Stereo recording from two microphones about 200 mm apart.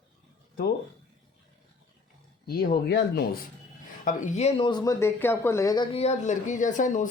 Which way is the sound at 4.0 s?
40° left (ahead or behind).